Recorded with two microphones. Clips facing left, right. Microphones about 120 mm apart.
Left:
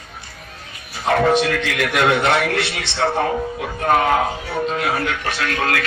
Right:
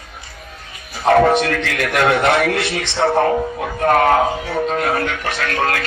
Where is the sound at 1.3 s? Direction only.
50° right (ahead or behind).